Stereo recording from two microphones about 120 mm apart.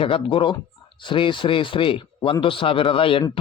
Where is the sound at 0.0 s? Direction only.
50° left (ahead or behind).